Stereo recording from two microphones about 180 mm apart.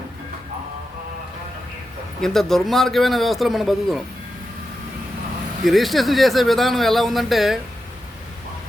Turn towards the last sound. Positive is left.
turn(degrees=0)  # may be behind; listen again after turning